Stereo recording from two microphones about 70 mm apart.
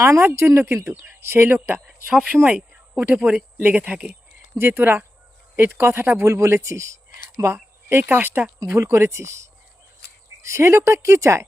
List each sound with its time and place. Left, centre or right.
0.0 s speech: right
1.9 s a sound: centre
2.4 s speech: centre
4.5 s speech: right
7.4 s a sound: right
8.0 s speech: right